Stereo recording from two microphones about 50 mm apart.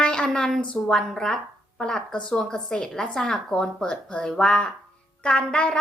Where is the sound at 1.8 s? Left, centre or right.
Centre.